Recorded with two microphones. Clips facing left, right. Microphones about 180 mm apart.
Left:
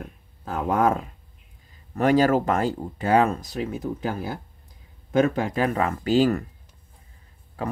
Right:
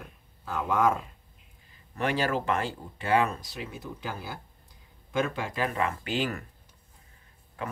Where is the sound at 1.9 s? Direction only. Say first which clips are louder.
Left 9 dB; 40° left (ahead or behind).